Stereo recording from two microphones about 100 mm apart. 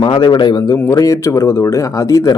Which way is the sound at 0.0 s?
55° left (ahead or behind).